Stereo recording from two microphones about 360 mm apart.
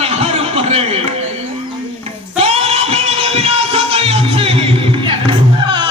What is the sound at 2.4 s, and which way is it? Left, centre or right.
Music, centre.